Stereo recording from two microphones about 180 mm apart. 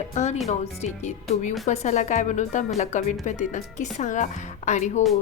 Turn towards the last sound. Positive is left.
turn(degrees=40)  # may be behind; listen again after turning